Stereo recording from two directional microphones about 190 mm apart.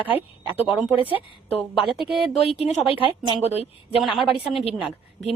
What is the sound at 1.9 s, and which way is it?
Speech, centre (ahead or behind).